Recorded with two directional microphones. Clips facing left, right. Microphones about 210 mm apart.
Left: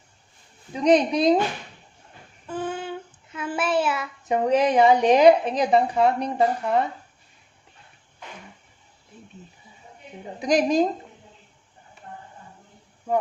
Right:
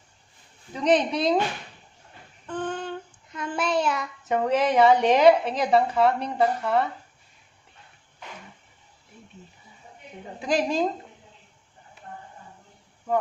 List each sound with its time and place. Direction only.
0.7 s a woman's voice: 15° left (ahead or behind)
2.5 s child singing: 5° left (ahead or behind)
4.3 s a woman's voice: 15° left (ahead or behind)
10.4 s a woman's voice: 15° left (ahead or behind)